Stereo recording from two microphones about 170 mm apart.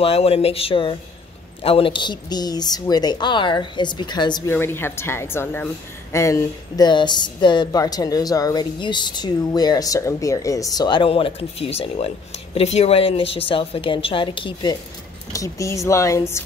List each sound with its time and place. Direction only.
0.0 s a woman's voice: 35° left (ahead or behind)
4.5 s a woman's voice: 15° left (ahead or behind)